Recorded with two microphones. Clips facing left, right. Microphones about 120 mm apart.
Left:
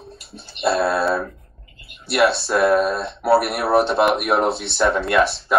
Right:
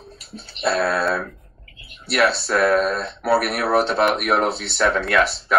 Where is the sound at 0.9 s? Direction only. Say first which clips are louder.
Left 2 dB; centre (ahead or behind).